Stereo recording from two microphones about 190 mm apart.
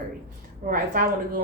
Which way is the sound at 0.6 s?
45° right (ahead or behind).